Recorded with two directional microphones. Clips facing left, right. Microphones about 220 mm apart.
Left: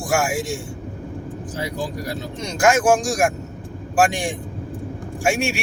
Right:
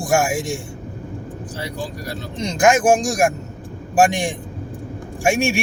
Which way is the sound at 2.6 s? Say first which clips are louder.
Right 1 dB; 20° right (ahead or behind).